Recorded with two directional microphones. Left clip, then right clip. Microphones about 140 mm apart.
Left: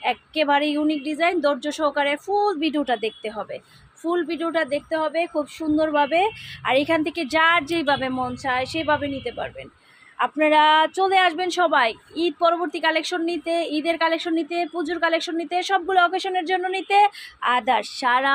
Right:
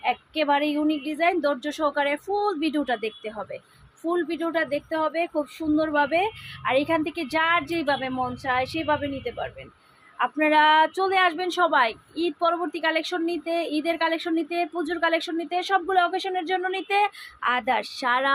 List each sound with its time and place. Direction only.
0.0 s speech: 25° left (ahead or behind)